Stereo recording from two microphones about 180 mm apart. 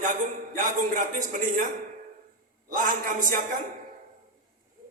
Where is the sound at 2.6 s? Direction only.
45° right (ahead or behind).